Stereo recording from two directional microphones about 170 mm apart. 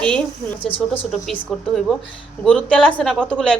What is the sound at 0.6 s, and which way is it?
Speech, 30° left (ahead or behind).